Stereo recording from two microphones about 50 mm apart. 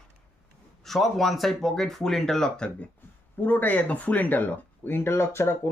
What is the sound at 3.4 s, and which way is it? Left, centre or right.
Speech, left.